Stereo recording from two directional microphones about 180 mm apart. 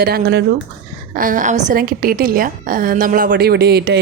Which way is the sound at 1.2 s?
45° right (ahead or behind).